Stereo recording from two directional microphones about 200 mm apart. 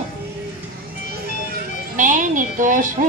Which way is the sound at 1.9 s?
40° right (ahead or behind).